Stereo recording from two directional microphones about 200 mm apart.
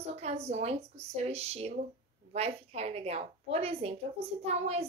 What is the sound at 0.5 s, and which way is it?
A woman's voice, 30° right (ahead or behind).